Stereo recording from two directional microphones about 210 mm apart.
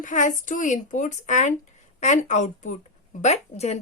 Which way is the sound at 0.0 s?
35° left (ahead or behind).